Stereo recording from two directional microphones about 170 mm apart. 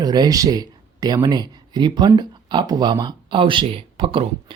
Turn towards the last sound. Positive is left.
turn(degrees=-30)  # may be behind; listen again after turning